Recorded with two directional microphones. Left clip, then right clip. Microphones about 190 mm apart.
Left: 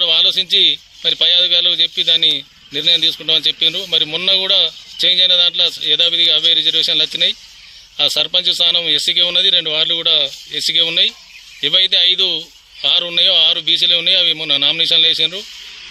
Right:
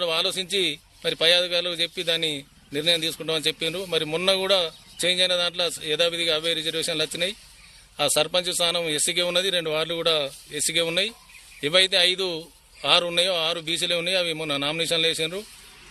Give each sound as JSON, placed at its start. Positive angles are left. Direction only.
{"t": 0.0, "sound": "a man's voice", "side_deg": -15}